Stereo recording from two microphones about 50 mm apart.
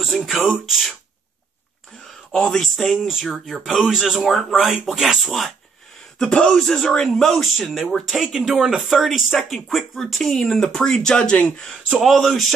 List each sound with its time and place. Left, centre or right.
0.1 s speech: centre
2.3 s speech: centre
3.9 s speech: centre
6.1 s speech: centre
6.6 s speech: centre
12.0 s speech: centre